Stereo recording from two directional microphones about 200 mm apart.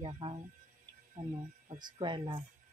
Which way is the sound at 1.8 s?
25° right (ahead or behind).